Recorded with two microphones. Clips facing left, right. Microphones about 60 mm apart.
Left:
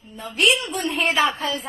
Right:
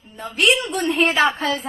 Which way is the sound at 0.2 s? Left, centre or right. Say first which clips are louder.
Right 2 dB; right.